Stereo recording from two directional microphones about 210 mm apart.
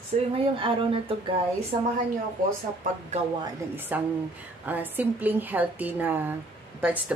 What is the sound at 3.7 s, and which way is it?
A woman's voice, 10° right (ahead or behind).